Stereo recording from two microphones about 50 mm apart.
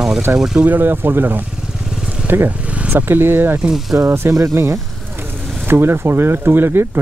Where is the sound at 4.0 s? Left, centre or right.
Right.